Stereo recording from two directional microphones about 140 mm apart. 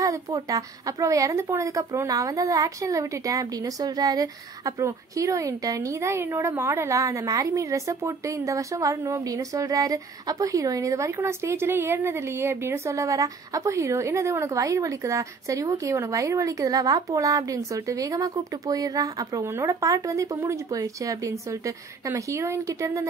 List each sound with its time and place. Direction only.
0.0 s a woman's voice: 25° right (ahead or behind)